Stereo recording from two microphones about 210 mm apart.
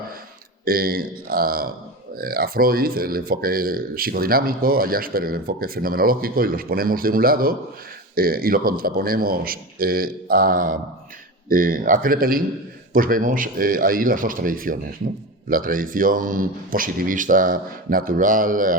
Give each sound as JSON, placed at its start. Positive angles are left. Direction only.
{"t": 0.6, "sound": "a man's voice", "side_deg": -45}